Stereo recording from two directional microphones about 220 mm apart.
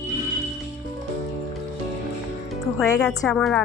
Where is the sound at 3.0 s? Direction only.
5° left (ahead or behind).